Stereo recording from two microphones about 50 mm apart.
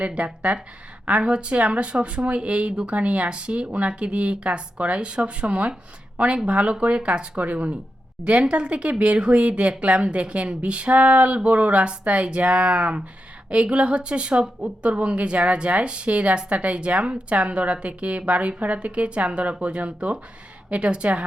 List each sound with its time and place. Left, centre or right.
0.0 s a woman's voice: right